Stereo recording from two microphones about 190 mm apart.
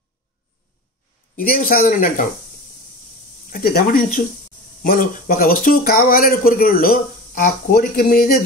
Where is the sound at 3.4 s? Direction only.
50° left (ahead or behind).